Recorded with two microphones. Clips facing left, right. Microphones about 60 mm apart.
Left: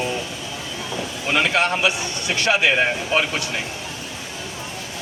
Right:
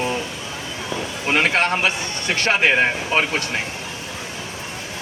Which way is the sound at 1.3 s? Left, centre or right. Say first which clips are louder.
Right 1 dB; right.